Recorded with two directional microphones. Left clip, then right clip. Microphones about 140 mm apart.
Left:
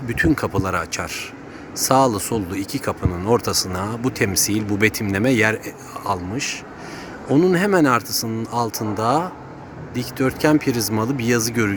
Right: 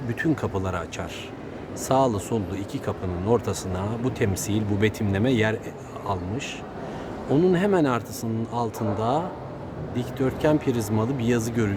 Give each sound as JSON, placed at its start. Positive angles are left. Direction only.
{"t": 0.1, "sound": "speech", "side_deg": 20}